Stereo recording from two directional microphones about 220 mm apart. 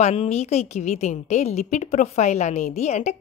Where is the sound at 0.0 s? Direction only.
30° left (ahead or behind).